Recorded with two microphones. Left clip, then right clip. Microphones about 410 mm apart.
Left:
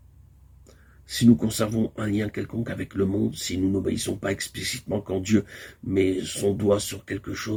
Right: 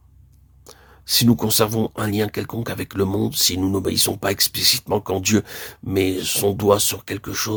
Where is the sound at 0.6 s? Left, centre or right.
Right.